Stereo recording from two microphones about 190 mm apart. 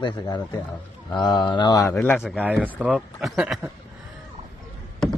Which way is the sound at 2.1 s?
Centre (ahead or behind).